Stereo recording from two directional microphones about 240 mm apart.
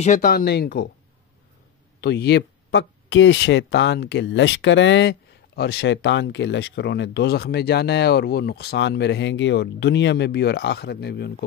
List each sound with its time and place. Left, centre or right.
0.0 s speech: left
2.0 s speech: left